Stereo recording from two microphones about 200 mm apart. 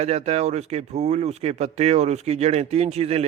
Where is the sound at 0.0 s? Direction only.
35° right (ahead or behind).